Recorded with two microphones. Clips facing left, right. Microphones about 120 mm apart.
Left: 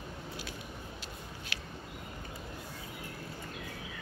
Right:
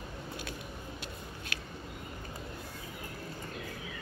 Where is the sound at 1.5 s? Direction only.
50° right (ahead or behind).